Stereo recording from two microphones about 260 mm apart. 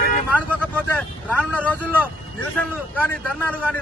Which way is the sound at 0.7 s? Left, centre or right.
Centre.